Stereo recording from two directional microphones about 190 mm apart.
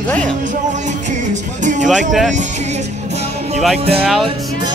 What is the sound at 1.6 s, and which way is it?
Music, 40° right (ahead or behind).